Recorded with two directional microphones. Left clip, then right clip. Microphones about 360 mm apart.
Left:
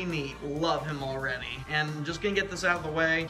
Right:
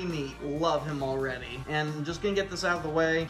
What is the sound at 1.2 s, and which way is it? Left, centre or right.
Speech, centre.